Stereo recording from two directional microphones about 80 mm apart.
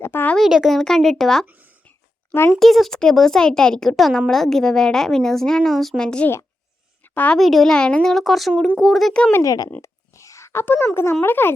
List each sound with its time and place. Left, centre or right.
0.0 s speech: left
0.3 s a woman's voice: centre
2.5 s a woman's voice: centre
7.1 s a woman's voice: left
7.3 s a woman's voice: centre
8.1 s a woman's voice: centre
9.4 s speech: left
9.8 s a sound: left
11.2 s speech: left